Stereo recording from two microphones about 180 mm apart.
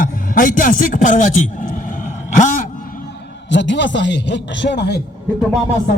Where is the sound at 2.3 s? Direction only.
45° left (ahead or behind).